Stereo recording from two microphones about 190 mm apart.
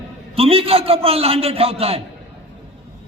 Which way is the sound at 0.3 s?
30° right (ahead or behind).